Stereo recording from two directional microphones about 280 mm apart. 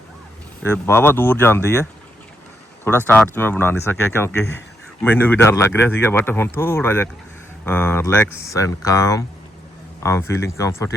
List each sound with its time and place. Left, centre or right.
0.6 s speech: centre